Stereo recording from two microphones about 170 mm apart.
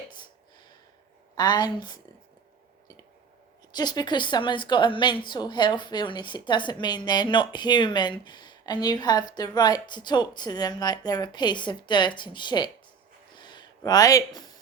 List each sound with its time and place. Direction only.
1.4 s a woman's voice: 25° left (ahead or behind)
3.7 s a woman's voice: 25° left (ahead or behind)
13.3 s a sound: 25° left (ahead or behind)